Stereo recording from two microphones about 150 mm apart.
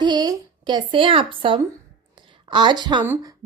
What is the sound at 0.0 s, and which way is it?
A woman's voice, 30° right (ahead or behind).